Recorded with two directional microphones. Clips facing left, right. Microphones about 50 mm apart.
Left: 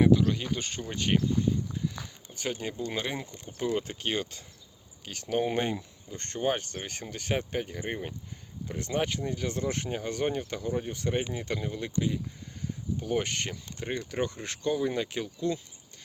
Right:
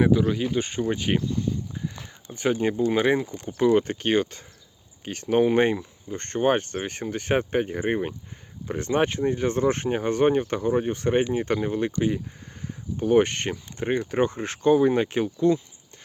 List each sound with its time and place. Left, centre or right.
0.0 s speech: centre
2.3 s speech: right
3.3 s speech: right
3.7 s speech: right